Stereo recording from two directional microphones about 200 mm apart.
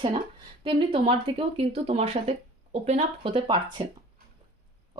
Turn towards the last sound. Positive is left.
turn(degrees=-25)  # may be behind; listen again after turning